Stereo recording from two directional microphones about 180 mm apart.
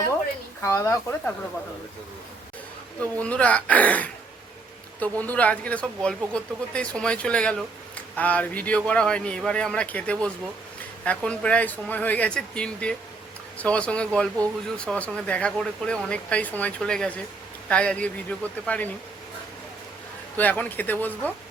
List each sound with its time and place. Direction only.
0.6 s speech: 15° left (ahead or behind)
3.0 s speech: 10° left (ahead or behind)
20.3 s speech: 10° left (ahead or behind)